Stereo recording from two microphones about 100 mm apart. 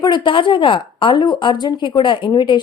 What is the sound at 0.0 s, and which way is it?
A woman's voice, 50° left (ahead or behind).